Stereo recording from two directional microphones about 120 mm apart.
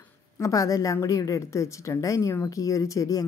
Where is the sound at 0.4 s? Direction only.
30° left (ahead or behind).